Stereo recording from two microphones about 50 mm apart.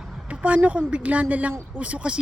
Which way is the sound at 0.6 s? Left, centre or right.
Right.